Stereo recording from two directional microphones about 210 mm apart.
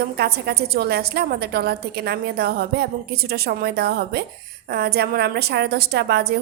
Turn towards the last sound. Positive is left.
turn(degrees=-50)  # may be behind; listen again after turning